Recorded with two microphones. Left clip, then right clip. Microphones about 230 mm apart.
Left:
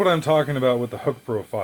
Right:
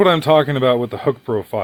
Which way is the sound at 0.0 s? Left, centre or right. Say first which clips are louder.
Right 6 dB; right.